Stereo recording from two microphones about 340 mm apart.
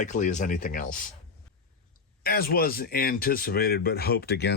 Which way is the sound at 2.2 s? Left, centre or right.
Left.